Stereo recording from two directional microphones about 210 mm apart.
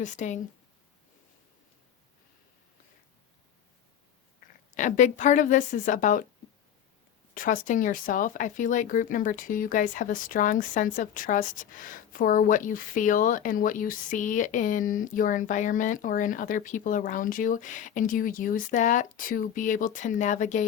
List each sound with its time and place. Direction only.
0.0 s speech: 35° left (ahead or behind)
4.7 s speech: 35° left (ahead or behind)
7.3 s speech: 40° left (ahead or behind)